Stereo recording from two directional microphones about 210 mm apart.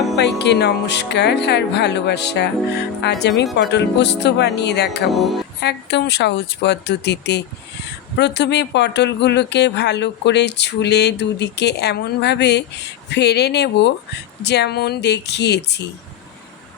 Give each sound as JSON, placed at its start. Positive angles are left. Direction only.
{"t": 0.2, "sound": "speech", "side_deg": 55}
{"t": 5.1, "sound": "speech", "side_deg": 0}
{"t": 5.5, "sound": "speech", "side_deg": 50}